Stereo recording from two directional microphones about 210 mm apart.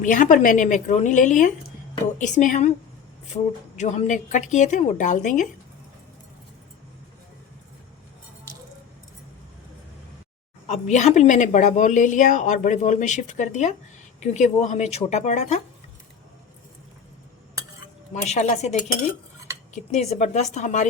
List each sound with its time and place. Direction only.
0.0 s speech: 40° left (ahead or behind)
10.7 s speech: 35° left (ahead or behind)
18.1 s speech: 35° left (ahead or behind)